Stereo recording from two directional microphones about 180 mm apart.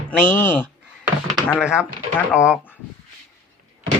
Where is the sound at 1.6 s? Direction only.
5° right (ahead or behind).